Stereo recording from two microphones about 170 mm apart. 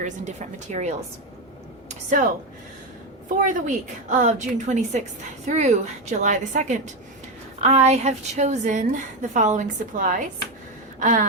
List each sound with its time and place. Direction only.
0.0 s a woman's voice: 45° right (ahead or behind)
3.2 s a woman's voice: 50° right (ahead or behind)